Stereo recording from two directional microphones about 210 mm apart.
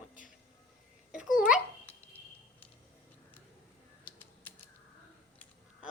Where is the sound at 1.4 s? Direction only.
5° right (ahead or behind).